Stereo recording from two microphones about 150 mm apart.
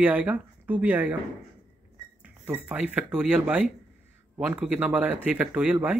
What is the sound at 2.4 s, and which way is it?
Speech, 10° right (ahead or behind).